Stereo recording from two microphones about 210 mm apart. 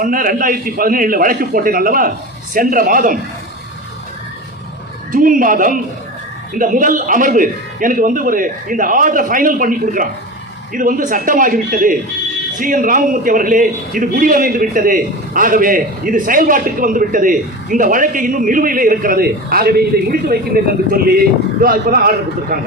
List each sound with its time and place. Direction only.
0.0 s a man's voice: 40° right (ahead or behind)
5.1 s a man's voice: 40° right (ahead or behind)